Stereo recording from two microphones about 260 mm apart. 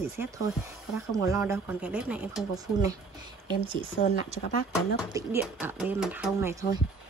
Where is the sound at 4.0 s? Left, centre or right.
Left.